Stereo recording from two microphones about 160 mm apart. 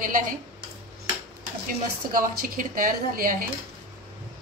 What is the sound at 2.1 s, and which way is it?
Speech, 60° right (ahead or behind).